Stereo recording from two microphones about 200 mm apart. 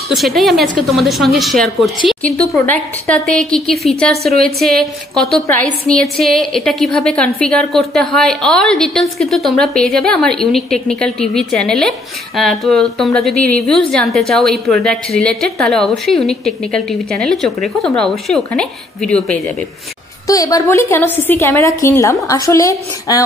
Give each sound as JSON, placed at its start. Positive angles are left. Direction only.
{"t": 0.1, "sound": "a woman's voice", "side_deg": 0}
{"t": 20.2, "sound": "a woman's voice", "side_deg": 15}